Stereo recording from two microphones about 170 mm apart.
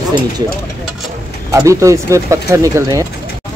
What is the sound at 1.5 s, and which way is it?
Speech, 20° right (ahead or behind).